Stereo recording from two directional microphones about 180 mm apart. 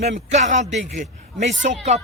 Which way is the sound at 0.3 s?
40° right (ahead or behind).